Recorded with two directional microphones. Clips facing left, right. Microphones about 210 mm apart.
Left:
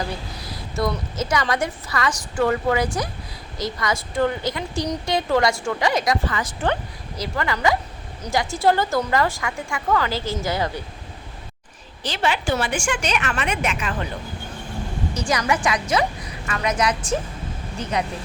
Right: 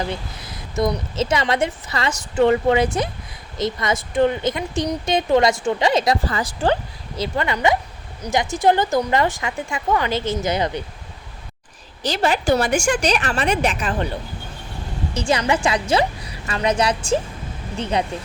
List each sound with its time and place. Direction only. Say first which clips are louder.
0.1 s a woman's voice: right 2 dB; 20° right (ahead or behind)
12.0 s a woman's voice: right 4 dB; 40° right (ahead or behind)
15.1 s a woman's voice: right 3 dB; 25° right (ahead or behind)